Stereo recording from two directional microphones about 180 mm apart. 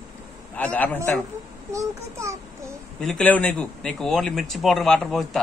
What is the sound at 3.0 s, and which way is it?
Speech, centre (ahead or behind).